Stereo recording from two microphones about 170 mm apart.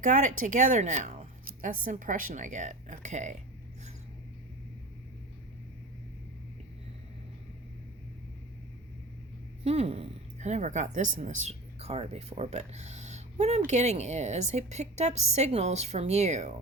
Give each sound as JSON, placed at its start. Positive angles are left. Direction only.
{"t": 0.0, "sound": "speech", "side_deg": -50}
{"t": 9.6, "sound": "a woman's voice", "side_deg": -40}